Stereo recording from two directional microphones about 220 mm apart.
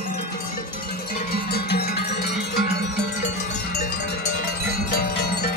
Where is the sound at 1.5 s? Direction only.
45° left (ahead or behind).